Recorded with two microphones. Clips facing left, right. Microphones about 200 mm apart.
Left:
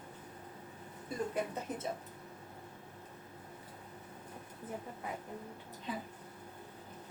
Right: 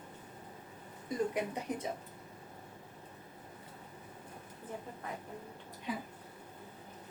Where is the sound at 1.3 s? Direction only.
15° right (ahead or behind).